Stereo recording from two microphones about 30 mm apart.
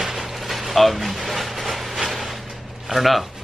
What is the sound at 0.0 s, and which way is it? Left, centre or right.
Vehicle, centre.